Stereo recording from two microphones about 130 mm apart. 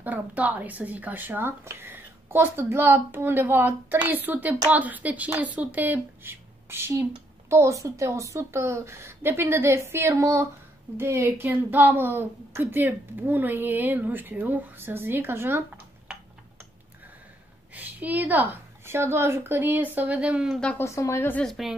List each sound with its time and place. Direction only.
0.0 s a woman's voice: 10° right (ahead or behind)
17.7 s a woman's voice: 10° right (ahead or behind)
20.6 s a woman's voice: 20° left (ahead or behind)
21.5 s a woman's voice: centre (ahead or behind)